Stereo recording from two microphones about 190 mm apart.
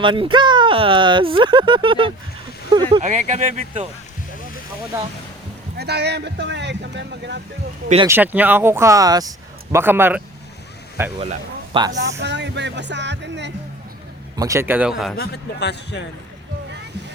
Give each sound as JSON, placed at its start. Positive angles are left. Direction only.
{"t": 0.0, "sound": "speech", "side_deg": -25}
{"t": 3.0, "sound": "speech", "side_deg": -40}
{"t": 5.7, "sound": "speech", "side_deg": -60}
{"t": 8.0, "sound": "speech", "side_deg": -10}
{"t": 11.2, "sound": "speech", "side_deg": -30}
{"t": 12.2, "sound": "speech", "side_deg": -65}
{"t": 14.3, "sound": "speech", "side_deg": -15}
{"t": 15.2, "sound": "speech", "side_deg": 60}